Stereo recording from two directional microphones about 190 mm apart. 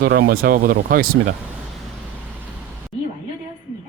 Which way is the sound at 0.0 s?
60° right (ahead or behind).